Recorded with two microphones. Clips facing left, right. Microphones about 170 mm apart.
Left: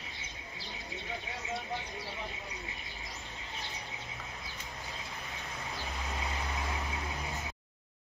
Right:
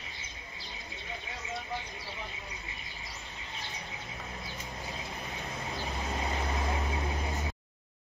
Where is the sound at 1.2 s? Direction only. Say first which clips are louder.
Left 1 dB; centre (ahead or behind).